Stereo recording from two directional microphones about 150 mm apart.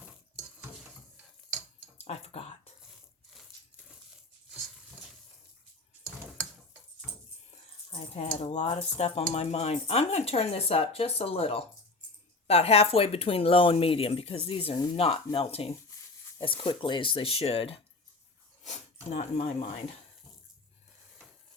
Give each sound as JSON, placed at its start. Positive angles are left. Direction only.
{"t": 2.0, "sound": "a sound", "side_deg": 45}
{"t": 7.5, "sound": "speech", "side_deg": 45}
{"t": 19.1, "sound": "speech", "side_deg": 50}